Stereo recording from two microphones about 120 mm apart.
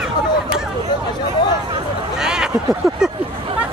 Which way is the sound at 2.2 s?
5° right (ahead or behind).